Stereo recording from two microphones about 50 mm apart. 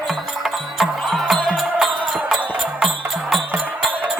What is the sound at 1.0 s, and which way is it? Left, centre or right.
Music, centre.